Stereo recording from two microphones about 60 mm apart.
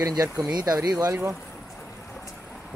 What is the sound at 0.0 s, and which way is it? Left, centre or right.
Speech, right.